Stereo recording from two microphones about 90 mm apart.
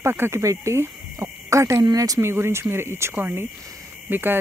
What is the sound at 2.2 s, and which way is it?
Speech, 30° right (ahead or behind).